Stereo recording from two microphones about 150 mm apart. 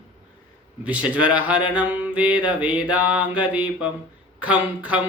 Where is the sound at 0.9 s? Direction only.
10° right (ahead or behind).